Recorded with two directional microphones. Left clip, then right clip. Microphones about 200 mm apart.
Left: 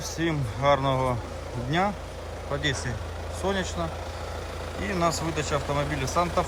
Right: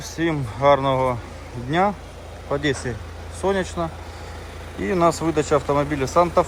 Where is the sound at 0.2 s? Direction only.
10° left (ahead or behind).